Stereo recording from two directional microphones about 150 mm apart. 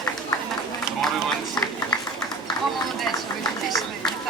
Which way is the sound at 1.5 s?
25° left (ahead or behind).